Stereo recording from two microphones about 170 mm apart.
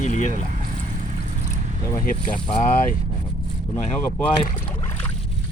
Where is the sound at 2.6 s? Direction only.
45° left (ahead or behind).